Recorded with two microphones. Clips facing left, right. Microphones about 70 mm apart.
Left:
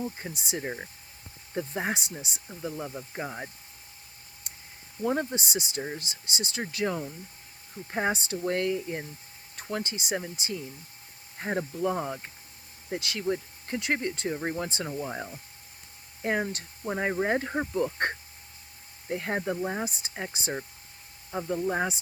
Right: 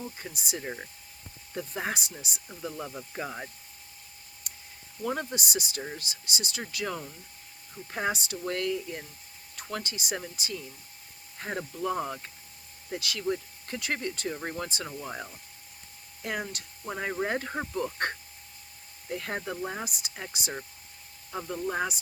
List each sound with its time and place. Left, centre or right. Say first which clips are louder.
0.2 s speech: left 3 dB; left
2.5 s speech: left 2 dB; centre
4.4 s a sound: even; left
5.3 s speech: left 1 dB; left
12.9 s speech: left 1 dB; left
16.2 s speech: left 5 dB; left
17.9 s a sound: left 2 dB; left
19.0 s speech: left 3 dB; left
19.4 s speech: left 4 dB; centre
19.8 s speech: left 4 dB; left